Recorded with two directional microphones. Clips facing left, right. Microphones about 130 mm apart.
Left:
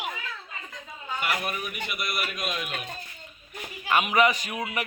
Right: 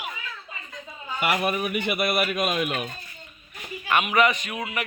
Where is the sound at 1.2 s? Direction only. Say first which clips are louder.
Right 7 dB; 70° right (ahead or behind).